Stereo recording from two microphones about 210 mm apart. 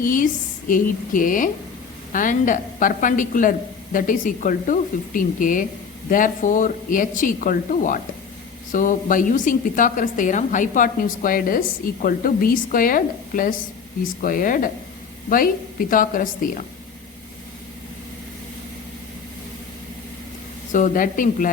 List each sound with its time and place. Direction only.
0.0 s a woman's voice: 40° left (ahead or behind)
20.7 s a woman's voice: 40° left (ahead or behind)